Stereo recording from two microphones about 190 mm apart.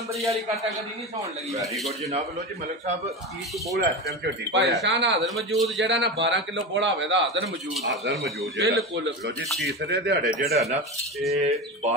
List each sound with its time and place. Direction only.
3.7 s a man's voice: 65° right (ahead or behind)
5.2 s a man's voice: centre (ahead or behind)
5.8 s a man's voice: 70° right (ahead or behind)
9.7 s speech: 60° right (ahead or behind)
11.2 s speech: 35° right (ahead or behind)